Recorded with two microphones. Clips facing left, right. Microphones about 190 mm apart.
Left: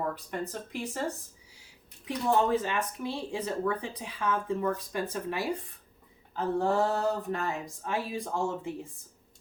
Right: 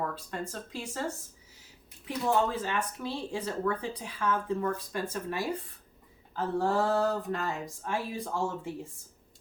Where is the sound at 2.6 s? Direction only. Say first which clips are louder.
Left 1 dB; 15° left (ahead or behind).